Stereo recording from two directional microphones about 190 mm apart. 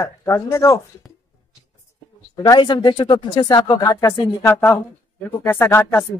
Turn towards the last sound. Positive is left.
turn(degrees=10)  # may be behind; listen again after turning